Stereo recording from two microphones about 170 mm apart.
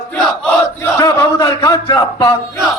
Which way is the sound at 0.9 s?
20° left (ahead or behind).